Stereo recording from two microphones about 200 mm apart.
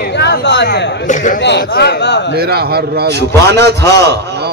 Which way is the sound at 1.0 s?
40° left (ahead or behind).